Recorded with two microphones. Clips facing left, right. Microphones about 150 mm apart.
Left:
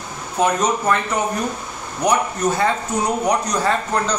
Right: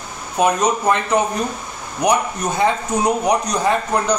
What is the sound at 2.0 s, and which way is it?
Speech, 15° right (ahead or behind).